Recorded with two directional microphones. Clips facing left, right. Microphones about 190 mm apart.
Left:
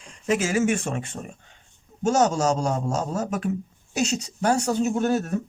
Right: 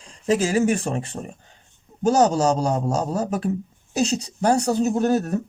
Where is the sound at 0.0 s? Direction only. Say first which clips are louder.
Right 3 dB; 35° right (ahead or behind).